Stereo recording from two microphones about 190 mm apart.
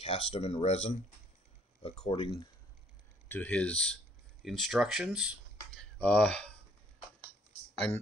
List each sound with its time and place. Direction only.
0.0 s speech: 30° left (ahead or behind)
3.3 s speech: 10° left (ahead or behind)